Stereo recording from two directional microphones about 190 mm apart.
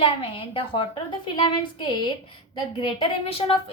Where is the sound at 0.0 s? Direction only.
30° left (ahead or behind).